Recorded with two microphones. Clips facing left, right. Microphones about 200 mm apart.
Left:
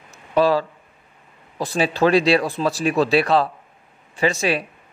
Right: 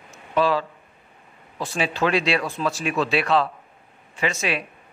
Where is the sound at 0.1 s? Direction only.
40° left (ahead or behind).